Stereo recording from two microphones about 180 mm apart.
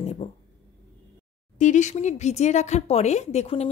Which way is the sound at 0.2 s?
40° left (ahead or behind).